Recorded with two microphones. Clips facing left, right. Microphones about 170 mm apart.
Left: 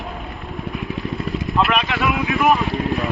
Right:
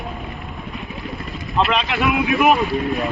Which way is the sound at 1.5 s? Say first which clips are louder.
Right 1 dB; 20° right (ahead or behind).